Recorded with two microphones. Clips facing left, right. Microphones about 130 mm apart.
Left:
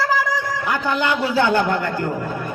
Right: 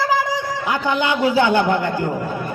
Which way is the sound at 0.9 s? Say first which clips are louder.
Right 3 dB; centre (ahead or behind).